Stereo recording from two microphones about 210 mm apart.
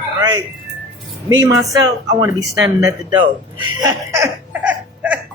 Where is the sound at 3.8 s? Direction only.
15° right (ahead or behind).